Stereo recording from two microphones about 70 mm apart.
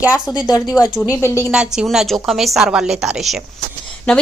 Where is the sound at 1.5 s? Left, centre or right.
Centre.